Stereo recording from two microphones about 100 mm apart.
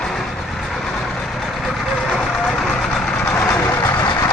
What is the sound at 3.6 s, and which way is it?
Vehicle, 35° left (ahead or behind).